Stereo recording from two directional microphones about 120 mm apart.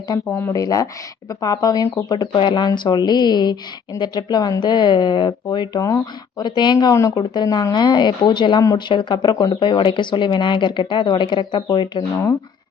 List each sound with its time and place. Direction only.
0.3 s speech: 25° left (ahead or behind); by 6.9 s 40° left (ahead or behind)
6.9 s speech: 25° left (ahead or behind)
7.2 s speech: 35° left (ahead or behind)